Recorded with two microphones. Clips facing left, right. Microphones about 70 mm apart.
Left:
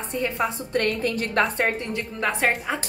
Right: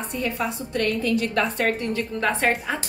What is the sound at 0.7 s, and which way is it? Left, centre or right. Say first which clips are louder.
Speech: right 4 dB; left.